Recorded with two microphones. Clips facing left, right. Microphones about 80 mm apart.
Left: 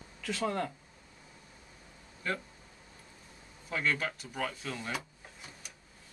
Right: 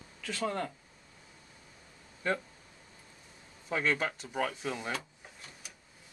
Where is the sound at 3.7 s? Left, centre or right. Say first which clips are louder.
Right 2 dB; centre.